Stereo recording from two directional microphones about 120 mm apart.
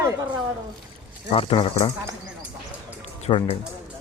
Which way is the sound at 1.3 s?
50° left (ahead or behind).